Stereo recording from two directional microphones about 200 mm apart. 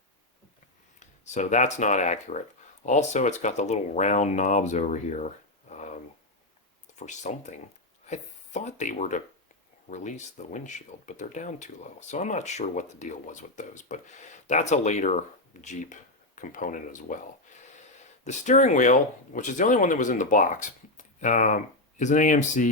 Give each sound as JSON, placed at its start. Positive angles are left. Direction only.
{"t": 0.9, "sound": "speech", "side_deg": 35}